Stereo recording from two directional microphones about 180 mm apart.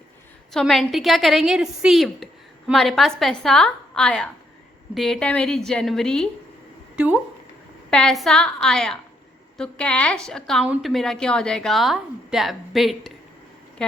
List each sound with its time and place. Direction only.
0.5 s a woman's voice: centre (ahead or behind)
7.9 s a woman's voice: 5° left (ahead or behind)